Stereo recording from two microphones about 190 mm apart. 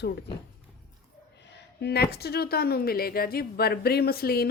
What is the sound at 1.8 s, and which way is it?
A woman's voice, 60° left (ahead or behind).